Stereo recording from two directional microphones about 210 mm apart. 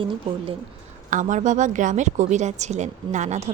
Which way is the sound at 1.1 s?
35° right (ahead or behind).